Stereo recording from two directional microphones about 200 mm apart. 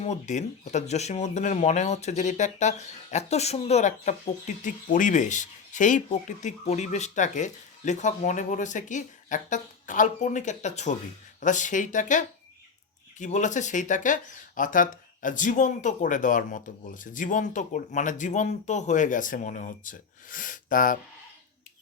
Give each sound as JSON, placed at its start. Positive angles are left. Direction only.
{"t": 0.0, "sound": "speech", "side_deg": 35}